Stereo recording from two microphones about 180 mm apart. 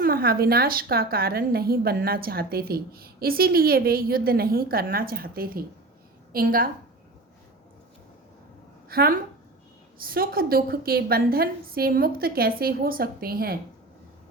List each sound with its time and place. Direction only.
0.0 s a woman's voice: 55° right (ahead or behind)
8.9 s a woman's voice: 55° right (ahead or behind)